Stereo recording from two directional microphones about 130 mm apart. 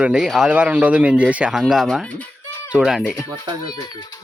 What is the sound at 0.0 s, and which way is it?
Speech, 5° right (ahead or behind).